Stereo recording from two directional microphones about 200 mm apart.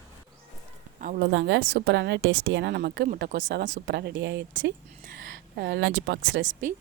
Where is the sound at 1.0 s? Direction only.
45° right (ahead or behind).